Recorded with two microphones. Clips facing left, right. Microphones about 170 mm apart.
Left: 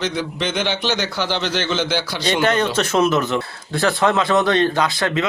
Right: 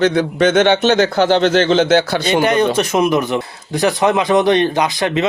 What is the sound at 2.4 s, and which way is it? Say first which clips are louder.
Speech: right 1 dB; 15° right (ahead or behind).